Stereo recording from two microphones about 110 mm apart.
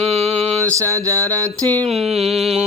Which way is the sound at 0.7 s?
30° right (ahead or behind).